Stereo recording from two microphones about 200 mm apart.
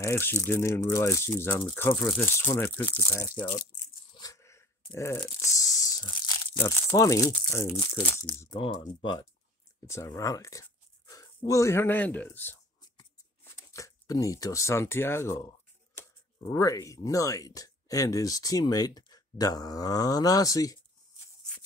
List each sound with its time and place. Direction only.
0.0 s speech: 15° left (ahead or behind)
4.1 s tearing: 20° left (ahead or behind)
6.6 s speech: 15° left (ahead or behind)